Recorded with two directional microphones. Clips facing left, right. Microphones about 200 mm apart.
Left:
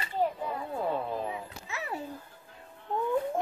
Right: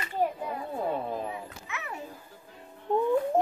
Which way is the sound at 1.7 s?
30° left (ahead or behind).